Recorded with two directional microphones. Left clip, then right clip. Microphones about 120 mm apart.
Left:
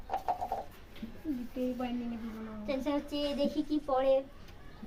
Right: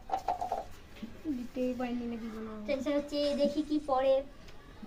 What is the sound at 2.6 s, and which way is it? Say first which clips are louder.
A woman's voice: right 2 dB; 25° left (ahead or behind).